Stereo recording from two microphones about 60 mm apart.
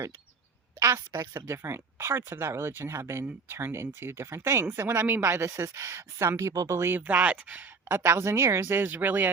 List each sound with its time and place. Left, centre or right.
1.1 s speech: right
1.5 s speech: right
6.9 s speech: right
7.9 s speech: right